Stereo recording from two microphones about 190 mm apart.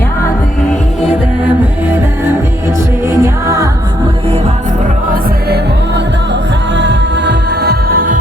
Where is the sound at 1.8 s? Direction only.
10° right (ahead or behind).